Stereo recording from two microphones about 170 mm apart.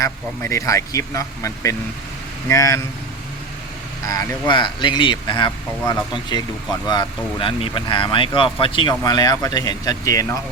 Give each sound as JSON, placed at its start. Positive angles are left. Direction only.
{"t": 0.0, "sound": "speech", "side_deg": 20}
{"t": 4.0, "sound": "speech", "side_deg": 20}